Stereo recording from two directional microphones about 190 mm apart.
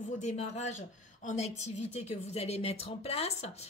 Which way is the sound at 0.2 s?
35° left (ahead or behind).